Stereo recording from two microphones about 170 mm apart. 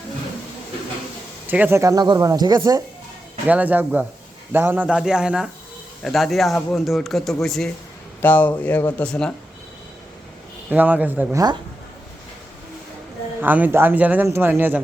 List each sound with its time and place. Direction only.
1.5 s speech: 10° right (ahead or behind)
3.4 s speech: 10° right (ahead or behind)
10.7 s speech: 10° right (ahead or behind)
13.4 s speech: 10° right (ahead or behind)